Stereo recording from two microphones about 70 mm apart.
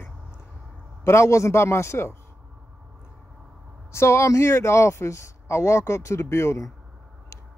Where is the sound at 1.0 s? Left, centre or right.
Left.